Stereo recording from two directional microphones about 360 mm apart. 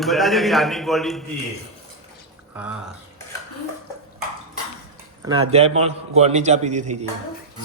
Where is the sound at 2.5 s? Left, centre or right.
Centre.